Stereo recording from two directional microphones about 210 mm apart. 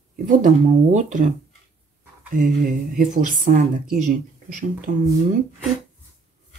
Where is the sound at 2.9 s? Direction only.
40° right (ahead or behind).